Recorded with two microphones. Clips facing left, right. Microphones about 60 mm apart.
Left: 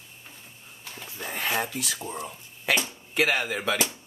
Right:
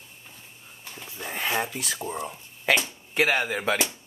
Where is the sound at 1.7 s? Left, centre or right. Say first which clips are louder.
Even; right.